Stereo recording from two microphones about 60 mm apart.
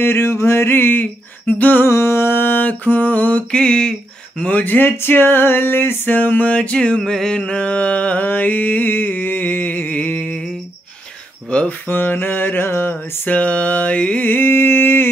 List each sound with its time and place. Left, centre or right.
0.0 s mantra: left
1.4 s a sound: left
1.9 s mantra: left
3.5 s a sound: centre
4.4 s mantra: left
6.5 s a sound: centre
7.0 s mantra: centre; by 10.4 s left
11.9 s mantra: left
14.2 s mantra: left